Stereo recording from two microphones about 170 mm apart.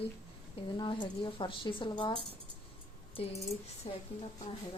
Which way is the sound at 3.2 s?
35° left (ahead or behind).